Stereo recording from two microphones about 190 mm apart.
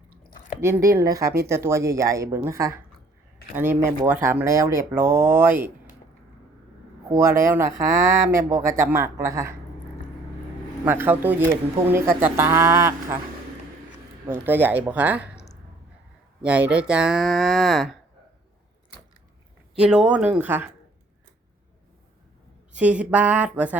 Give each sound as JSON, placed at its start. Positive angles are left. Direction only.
{"t": 0.6, "sound": "speech", "side_deg": -15}
{"t": 7.1, "sound": "speech", "side_deg": -15}
{"t": 10.8, "sound": "speech", "side_deg": -10}
{"t": 14.3, "sound": "speech", "side_deg": -10}
{"t": 16.4, "sound": "speech", "side_deg": -5}
{"t": 19.8, "sound": "speech", "side_deg": -5}
{"t": 22.7, "sound": "speech", "side_deg": -5}